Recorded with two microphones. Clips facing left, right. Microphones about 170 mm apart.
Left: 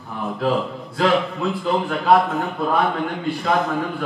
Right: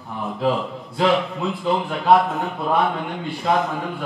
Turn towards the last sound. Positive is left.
turn(degrees=0)  # may be behind; listen again after turning